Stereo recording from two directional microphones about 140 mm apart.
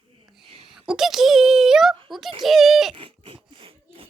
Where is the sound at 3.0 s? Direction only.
40° right (ahead or behind).